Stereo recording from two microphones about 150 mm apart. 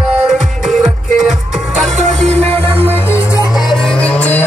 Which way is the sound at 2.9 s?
15° left (ahead or behind).